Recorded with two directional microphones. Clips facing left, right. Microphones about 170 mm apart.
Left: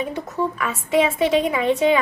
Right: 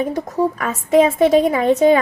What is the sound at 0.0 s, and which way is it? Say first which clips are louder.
A woman's voice: right 5 dB; 40° right (ahead or behind).